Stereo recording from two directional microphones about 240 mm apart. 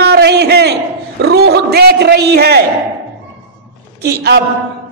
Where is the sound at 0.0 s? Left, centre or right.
Right.